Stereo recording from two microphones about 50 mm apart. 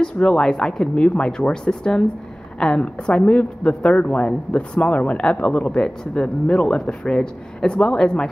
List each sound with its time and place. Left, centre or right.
0.0 s speech: centre